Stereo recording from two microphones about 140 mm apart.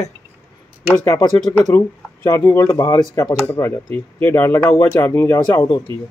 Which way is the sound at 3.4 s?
10° left (ahead or behind).